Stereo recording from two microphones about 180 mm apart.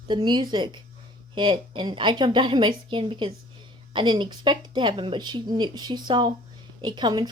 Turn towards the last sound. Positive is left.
turn(degrees=-25)  # may be behind; listen again after turning